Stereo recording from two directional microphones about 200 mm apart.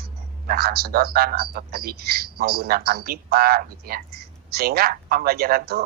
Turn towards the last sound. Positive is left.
turn(degrees=-50)  # may be behind; listen again after turning